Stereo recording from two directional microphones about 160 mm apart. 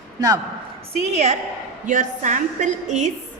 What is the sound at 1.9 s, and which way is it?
A woman's voice, 55° right (ahead or behind).